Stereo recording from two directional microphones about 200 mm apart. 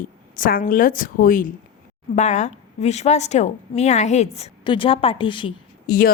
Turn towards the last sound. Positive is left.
turn(degrees=50)  # may be behind; listen again after turning